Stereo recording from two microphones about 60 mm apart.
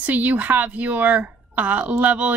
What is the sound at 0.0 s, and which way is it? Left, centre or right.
Speech, right.